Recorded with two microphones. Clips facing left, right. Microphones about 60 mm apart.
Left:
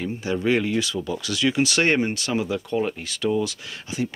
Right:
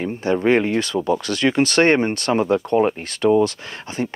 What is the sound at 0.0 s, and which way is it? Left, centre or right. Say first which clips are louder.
Speech: right 5 dB; right.